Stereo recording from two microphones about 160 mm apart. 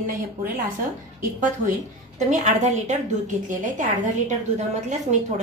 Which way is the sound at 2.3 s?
45° right (ahead or behind).